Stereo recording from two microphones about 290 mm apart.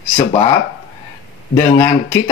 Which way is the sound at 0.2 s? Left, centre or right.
Centre.